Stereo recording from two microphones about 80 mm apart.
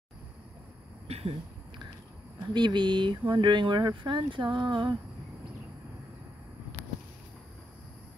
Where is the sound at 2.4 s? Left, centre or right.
Right.